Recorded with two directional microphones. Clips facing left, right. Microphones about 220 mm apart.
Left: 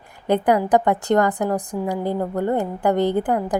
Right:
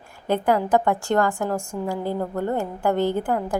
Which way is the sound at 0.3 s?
15° left (ahead or behind).